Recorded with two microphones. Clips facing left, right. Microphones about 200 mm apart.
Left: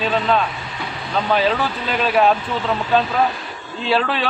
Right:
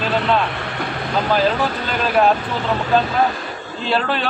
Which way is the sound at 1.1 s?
Centre (ahead or behind).